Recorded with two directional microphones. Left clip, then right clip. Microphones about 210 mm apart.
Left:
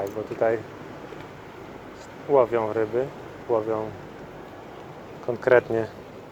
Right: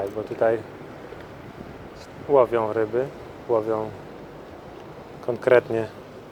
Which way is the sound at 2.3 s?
15° right (ahead or behind).